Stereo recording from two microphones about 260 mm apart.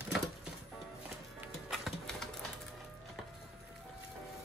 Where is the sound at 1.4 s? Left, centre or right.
Centre.